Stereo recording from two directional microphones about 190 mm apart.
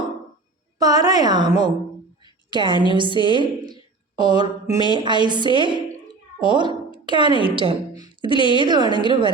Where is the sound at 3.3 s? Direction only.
25° right (ahead or behind).